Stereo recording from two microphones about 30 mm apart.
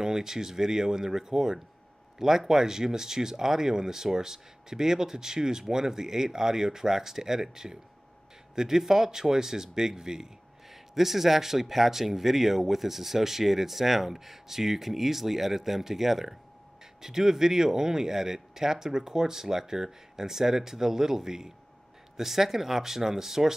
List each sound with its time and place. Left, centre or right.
0.0 s speech: centre
10.7 s speech: centre